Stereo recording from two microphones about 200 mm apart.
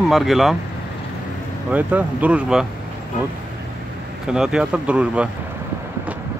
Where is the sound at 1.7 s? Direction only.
5° right (ahead or behind).